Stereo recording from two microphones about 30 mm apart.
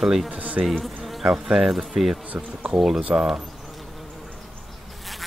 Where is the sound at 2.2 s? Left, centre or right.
Right.